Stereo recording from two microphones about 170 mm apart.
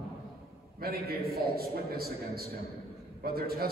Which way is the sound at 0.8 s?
60° right (ahead or behind).